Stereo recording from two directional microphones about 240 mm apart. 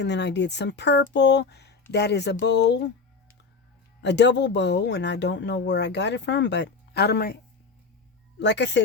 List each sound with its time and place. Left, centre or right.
0.0 s speech: left
4.0 s speech: left
8.4 s speech: left